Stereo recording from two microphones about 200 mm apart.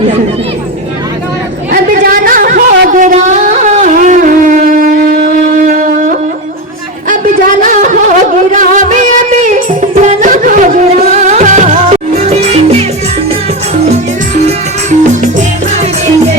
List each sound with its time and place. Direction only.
1.7 s a sound: 45° right (ahead or behind)
7.6 s music: 40° right (ahead or behind)
14.4 s music: 35° right (ahead or behind)